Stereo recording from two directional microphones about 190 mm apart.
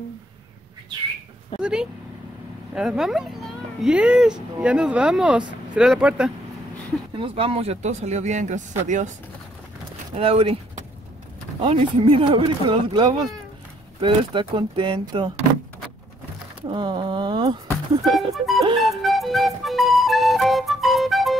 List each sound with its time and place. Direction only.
1.6 s speech: 5° right (ahead or behind)
7.2 s speech: 30° right (ahead or behind)
10.1 s speech: 30° right (ahead or behind)
16.6 s speech: 25° right (ahead or behind)
18.3 s speech: centre (ahead or behind)
18.8 s music: centre (ahead or behind)